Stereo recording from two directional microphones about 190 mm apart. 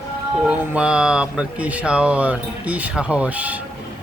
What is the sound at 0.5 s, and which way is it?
Speech, 5° right (ahead or behind).